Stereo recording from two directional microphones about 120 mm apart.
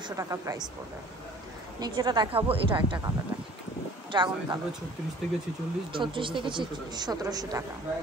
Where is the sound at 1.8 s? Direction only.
35° right (ahead or behind).